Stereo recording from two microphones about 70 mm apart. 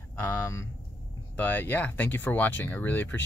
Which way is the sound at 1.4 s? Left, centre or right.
Left.